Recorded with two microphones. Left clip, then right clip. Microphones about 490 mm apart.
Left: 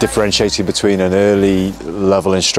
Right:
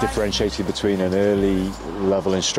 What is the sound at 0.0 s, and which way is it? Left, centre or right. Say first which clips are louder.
Speech: left 7 dB; left.